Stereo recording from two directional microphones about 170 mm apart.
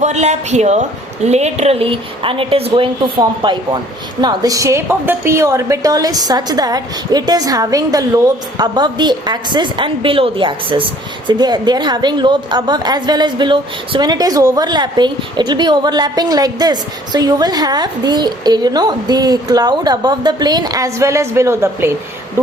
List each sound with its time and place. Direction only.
0.0 s a woman's voice: 40° right (ahead or behind); by 21.9 s 15° right (ahead or behind)